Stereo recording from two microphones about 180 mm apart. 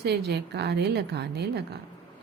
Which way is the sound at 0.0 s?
65° right (ahead or behind).